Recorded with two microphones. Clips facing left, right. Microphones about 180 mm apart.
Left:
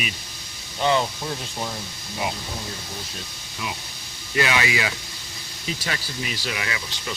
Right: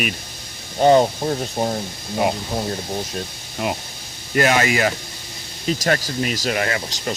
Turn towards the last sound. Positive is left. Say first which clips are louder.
# right 7 dB
turn(degrees=-50)  # may be behind; listen again after turning